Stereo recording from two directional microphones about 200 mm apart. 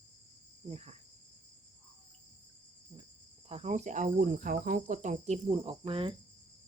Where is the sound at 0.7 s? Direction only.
30° right (ahead or behind).